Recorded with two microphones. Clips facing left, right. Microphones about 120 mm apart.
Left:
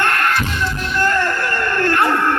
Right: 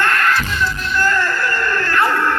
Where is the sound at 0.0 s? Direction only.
50° left (ahead or behind).